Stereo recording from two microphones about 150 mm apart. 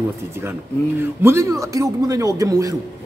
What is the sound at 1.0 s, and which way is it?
A man's voice, 15° right (ahead or behind).